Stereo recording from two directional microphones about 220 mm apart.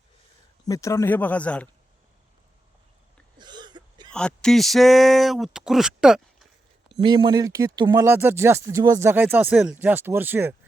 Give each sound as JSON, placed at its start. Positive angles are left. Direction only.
{"t": 0.7, "sound": "speech", "side_deg": 15}
{"t": 3.3, "sound": "a sound", "side_deg": -20}
{"t": 4.1, "sound": "speech", "side_deg": 5}
{"t": 7.0, "sound": "speech", "side_deg": -20}